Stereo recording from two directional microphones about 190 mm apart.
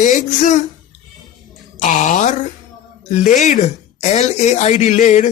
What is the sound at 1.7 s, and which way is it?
Speech, 45° left (ahead or behind).